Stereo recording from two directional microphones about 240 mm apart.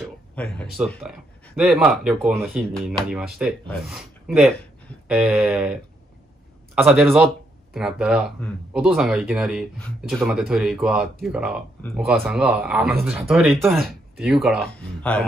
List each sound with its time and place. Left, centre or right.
0.0 s speech: centre